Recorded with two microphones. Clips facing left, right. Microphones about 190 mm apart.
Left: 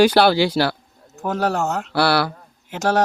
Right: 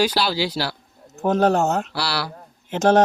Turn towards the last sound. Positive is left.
turn(degrees=-20)  # may be behind; listen again after turning